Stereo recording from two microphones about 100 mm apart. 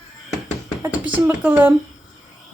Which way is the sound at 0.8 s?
15° right (ahead or behind).